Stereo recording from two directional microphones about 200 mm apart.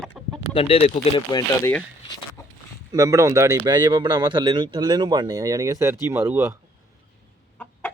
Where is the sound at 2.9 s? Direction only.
15° right (ahead or behind).